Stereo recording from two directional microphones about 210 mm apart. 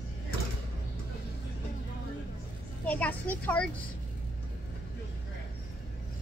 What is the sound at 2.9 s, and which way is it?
Speech, 10° left (ahead or behind).